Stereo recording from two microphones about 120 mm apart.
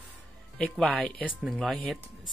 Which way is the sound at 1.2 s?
10° right (ahead or behind).